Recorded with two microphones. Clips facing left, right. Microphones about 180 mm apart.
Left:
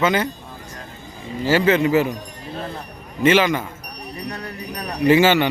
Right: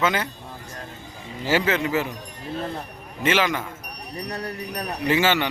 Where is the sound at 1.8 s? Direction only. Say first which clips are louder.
Left 7 dB; 15° left (ahead or behind).